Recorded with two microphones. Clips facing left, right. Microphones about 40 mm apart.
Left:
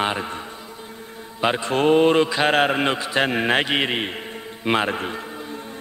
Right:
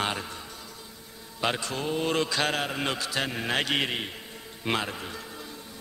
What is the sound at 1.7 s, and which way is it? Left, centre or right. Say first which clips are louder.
Speech: left 13 dB; left.